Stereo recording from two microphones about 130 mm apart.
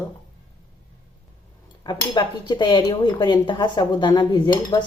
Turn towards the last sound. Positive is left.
turn(degrees=30)  # may be behind; listen again after turning